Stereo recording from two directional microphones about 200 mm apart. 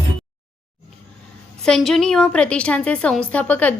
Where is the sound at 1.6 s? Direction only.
Centre (ahead or behind).